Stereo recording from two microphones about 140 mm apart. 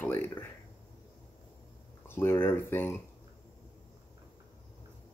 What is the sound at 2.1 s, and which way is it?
Speech, 15° left (ahead or behind).